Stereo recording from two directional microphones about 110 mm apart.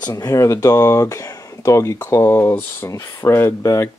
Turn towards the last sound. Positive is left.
turn(degrees=25)  # may be behind; listen again after turning